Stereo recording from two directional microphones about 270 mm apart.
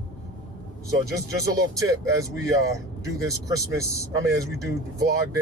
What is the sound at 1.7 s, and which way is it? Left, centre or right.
Speech, centre.